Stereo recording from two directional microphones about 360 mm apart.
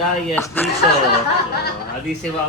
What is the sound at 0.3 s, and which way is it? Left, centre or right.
Speech, centre.